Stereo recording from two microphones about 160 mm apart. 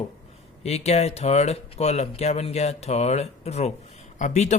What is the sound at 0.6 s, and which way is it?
Speech, 40° left (ahead or behind).